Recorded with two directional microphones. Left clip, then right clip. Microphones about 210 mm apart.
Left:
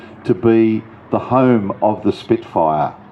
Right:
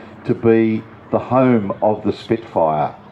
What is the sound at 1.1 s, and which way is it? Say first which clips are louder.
Speech: left 1 dB; 25° left (ahead or behind).